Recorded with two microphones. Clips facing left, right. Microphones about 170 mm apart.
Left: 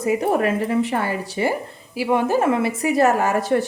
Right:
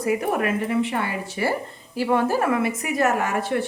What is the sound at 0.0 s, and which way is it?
A woman's voice, 25° left (ahead or behind).